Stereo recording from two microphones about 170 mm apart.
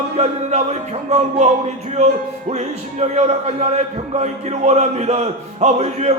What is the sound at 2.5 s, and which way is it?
A man's voice, 40° right (ahead or behind).